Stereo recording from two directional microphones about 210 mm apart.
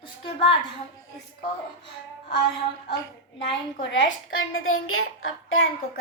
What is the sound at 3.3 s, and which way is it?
Speech, 60° left (ahead or behind).